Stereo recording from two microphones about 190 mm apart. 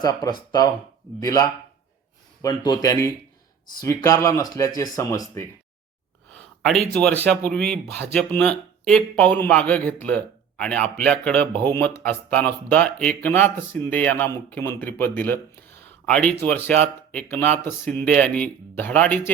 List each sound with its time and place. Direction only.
0.0 s speech: 20° left (ahead or behind)
6.6 s speech: centre (ahead or behind)